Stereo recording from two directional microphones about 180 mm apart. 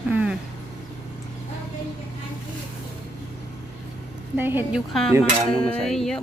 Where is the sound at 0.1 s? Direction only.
10° right (ahead or behind).